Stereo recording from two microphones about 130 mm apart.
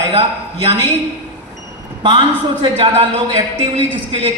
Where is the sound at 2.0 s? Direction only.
40° right (ahead or behind).